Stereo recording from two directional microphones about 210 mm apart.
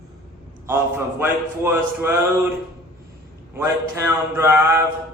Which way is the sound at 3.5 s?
10° right (ahead or behind).